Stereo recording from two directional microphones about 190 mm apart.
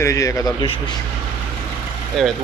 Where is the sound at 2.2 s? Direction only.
Centre (ahead or behind).